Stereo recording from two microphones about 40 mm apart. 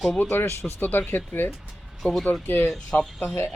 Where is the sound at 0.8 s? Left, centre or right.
Left.